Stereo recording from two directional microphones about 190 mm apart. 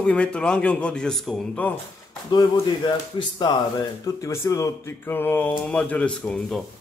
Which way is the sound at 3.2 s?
25° left (ahead or behind).